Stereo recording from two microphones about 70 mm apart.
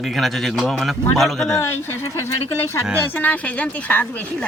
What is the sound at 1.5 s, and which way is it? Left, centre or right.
Speech, left.